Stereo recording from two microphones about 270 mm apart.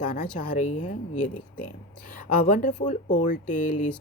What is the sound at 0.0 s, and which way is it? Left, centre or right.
Speech, left.